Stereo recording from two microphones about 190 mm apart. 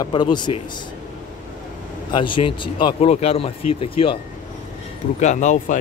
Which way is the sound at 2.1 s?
25° left (ahead or behind).